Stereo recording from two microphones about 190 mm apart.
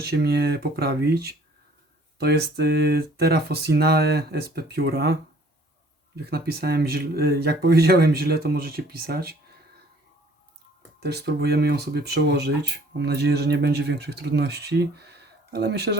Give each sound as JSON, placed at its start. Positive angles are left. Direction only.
{"t": 0.0, "sound": "speech", "side_deg": -55}
{"t": 6.1, "sound": "speech", "side_deg": -55}
{"t": 11.0, "sound": "speech", "side_deg": -60}